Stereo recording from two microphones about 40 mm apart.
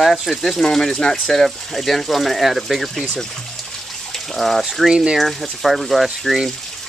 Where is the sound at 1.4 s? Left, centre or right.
Centre.